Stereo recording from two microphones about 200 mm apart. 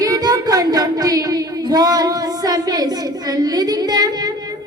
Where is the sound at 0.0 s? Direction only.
20° right (ahead or behind).